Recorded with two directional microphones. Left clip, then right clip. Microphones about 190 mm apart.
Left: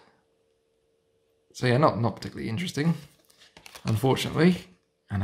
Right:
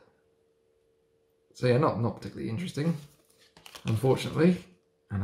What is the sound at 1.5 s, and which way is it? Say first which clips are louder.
Speech: left 3 dB; 40° left (ahead or behind).